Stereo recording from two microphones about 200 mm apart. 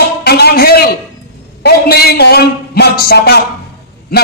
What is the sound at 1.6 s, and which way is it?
A man's voice, 50° left (ahead or behind).